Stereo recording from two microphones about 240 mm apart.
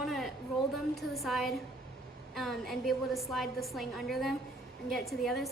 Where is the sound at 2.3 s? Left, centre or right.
Centre.